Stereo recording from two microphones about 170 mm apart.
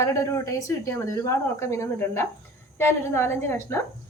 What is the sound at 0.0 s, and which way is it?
A woman's voice, 15° left (ahead or behind).